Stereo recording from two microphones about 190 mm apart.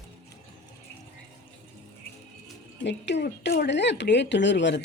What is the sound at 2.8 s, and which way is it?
Speech, 70° left (ahead or behind).